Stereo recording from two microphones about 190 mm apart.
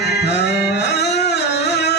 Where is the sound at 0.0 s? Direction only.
60° left (ahead or behind).